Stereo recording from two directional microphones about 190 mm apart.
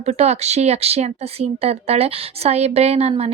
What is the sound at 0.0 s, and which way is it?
Speech, 35° right (ahead or behind).